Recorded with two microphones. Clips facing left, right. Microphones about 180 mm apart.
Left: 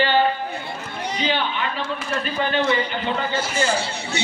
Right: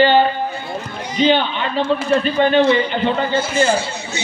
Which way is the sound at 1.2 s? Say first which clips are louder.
Right 9 dB; 25° right (ahead or behind).